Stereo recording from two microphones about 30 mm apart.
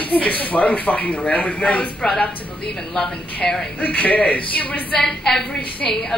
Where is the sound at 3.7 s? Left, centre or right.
Left.